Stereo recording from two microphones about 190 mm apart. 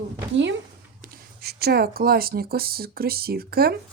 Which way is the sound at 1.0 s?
55° right (ahead or behind).